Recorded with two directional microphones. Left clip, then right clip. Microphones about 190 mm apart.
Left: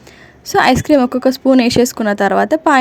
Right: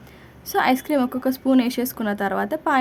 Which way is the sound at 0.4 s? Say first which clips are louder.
Left 9 dB; 25° left (ahead or behind).